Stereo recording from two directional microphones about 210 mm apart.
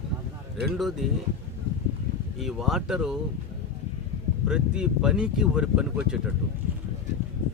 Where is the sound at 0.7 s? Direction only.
Centre (ahead or behind).